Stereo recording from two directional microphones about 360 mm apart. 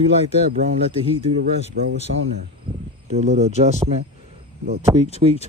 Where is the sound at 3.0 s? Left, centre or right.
Centre.